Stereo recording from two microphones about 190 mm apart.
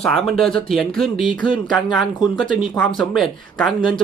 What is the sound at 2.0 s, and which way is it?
Speech, centre (ahead or behind).